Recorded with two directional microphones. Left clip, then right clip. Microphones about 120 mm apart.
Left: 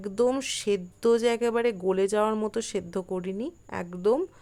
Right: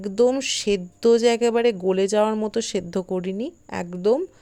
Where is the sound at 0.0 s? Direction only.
20° right (ahead or behind).